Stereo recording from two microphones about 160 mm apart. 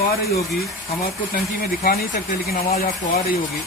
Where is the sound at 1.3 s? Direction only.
70° left (ahead or behind).